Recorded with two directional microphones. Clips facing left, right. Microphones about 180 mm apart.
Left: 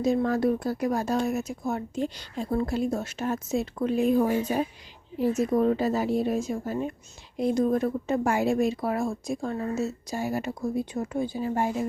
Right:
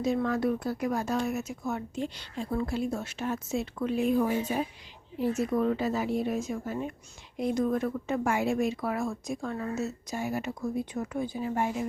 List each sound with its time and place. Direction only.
0.0 s speech: 35° left (ahead or behind)